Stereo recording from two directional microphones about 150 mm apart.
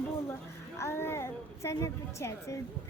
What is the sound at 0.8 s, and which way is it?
A woman's voice, 15° left (ahead or behind).